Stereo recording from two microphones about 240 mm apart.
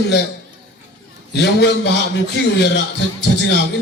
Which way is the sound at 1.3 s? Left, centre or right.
Left.